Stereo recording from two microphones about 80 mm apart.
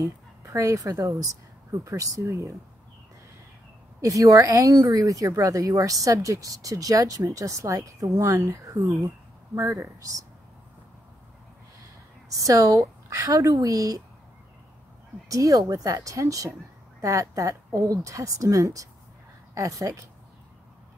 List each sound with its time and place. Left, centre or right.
0.0 s a woman's voice: right
4.0 s speech: right
12.3 s speech: right
15.2 s speech: right